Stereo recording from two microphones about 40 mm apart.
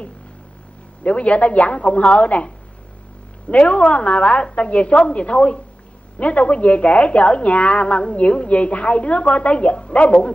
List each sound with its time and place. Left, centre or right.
1.0 s a woman's voice: left